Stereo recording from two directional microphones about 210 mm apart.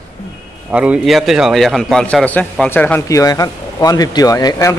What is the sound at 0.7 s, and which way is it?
A man's voice, 5° right (ahead or behind).